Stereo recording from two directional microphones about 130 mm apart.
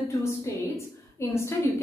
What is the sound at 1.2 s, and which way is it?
Speech, 20° left (ahead or behind).